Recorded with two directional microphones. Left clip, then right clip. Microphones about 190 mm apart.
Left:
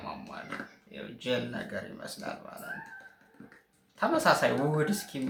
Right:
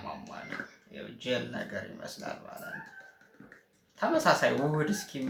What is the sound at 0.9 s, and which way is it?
Speech, 20° left (ahead or behind).